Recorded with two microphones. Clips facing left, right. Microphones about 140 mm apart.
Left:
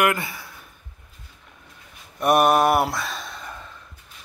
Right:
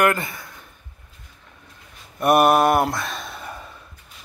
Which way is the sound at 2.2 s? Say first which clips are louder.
Right 2 dB; centre (ahead or behind).